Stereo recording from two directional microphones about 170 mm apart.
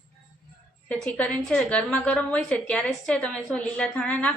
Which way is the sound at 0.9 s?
10° left (ahead or behind).